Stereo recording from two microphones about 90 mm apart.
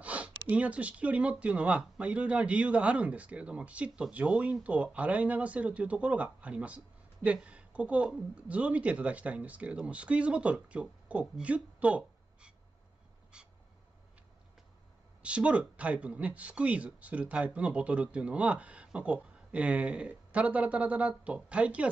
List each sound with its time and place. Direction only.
0.0 s speech: 15° right (ahead or behind)
15.2 s speech: 15° right (ahead or behind)